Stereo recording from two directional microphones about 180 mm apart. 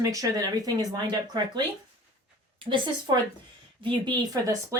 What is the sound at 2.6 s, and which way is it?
Speech, 25° right (ahead or behind).